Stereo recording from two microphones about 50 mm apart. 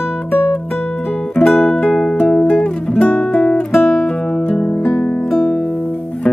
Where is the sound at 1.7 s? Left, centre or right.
Centre.